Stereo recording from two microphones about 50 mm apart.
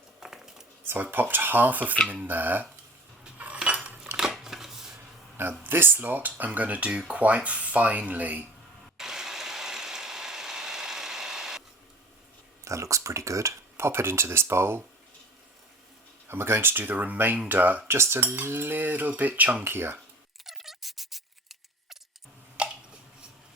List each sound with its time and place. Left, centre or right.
0.2 s a sound: centre
1.1 s speech: right
3.3 s cutlery: right
4.2 s shuffling cards: centre
5.4 s cutlery: right
6.3 s speech: right
9.0 s ratchet: centre
12.6 s speech: right
16.3 s speech: right
17.8 s cutlery: right
19.4 s speech: right
19.6 s cutlery: right
20.4 s a sound: centre
22.6 s a sound: right